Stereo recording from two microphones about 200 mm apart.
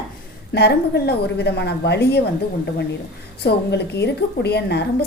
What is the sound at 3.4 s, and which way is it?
A woman's voice, 55° left (ahead or behind).